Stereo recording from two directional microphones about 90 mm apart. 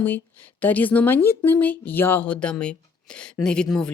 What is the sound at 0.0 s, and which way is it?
A woman's voice, 20° left (ahead or behind).